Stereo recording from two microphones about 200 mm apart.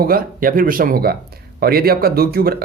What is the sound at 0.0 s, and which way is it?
Speech, 45° right (ahead or behind).